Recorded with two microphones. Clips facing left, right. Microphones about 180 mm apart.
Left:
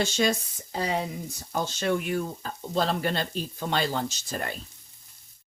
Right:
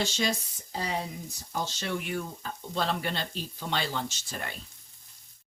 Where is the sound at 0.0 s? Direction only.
50° left (ahead or behind).